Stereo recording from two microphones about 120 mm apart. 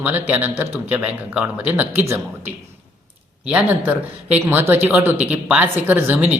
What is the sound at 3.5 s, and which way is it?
Speech, 10° right (ahead or behind).